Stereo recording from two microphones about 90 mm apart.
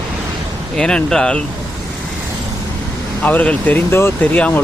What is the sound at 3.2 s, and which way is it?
Speech, 15° left (ahead or behind).